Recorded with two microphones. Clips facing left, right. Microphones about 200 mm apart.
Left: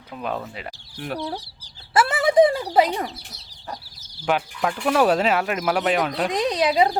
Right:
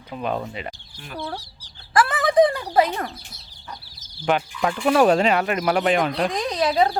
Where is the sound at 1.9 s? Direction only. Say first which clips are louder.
Even; 25° left (ahead or behind).